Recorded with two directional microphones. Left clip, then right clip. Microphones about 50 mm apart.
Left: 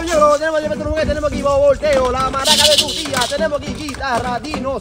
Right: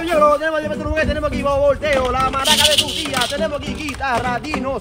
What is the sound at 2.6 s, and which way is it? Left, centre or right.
Speech, left.